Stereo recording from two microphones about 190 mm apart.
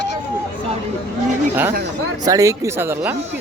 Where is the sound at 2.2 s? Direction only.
15° right (ahead or behind).